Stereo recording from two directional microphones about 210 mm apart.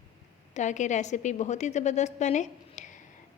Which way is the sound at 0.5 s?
35° left (ahead or behind).